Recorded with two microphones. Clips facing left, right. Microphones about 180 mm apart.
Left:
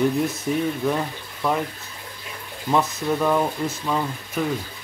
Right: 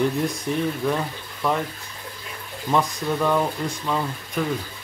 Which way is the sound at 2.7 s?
5° left (ahead or behind).